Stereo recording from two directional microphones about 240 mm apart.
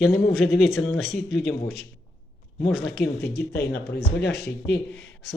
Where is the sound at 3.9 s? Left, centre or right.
Left.